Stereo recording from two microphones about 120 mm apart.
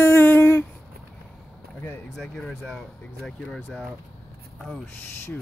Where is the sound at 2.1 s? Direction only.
5° left (ahead or behind).